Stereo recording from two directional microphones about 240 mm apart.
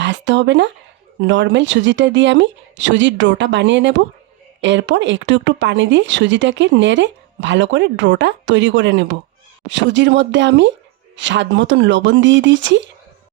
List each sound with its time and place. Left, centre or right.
0.0 s speech: right